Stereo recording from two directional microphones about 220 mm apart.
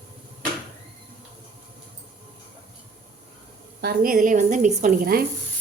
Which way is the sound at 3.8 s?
45° right (ahead or behind).